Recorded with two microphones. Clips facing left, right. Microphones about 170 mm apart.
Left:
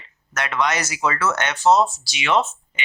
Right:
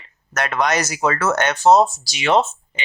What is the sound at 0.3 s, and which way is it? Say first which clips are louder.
Speech: right 3 dB; 40° right (ahead or behind).